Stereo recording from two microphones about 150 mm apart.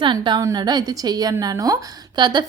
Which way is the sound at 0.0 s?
30° right (ahead or behind).